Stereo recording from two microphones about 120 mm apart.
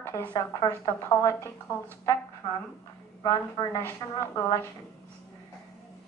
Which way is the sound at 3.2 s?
30° left (ahead or behind).